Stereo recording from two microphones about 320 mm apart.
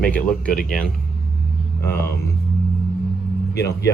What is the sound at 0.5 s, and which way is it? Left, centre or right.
Speech, left.